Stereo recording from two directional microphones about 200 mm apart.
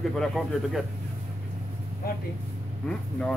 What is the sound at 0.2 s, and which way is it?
Speech, centre (ahead or behind).